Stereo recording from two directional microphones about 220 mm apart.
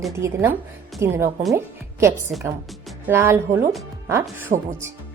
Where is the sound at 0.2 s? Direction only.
15° right (ahead or behind).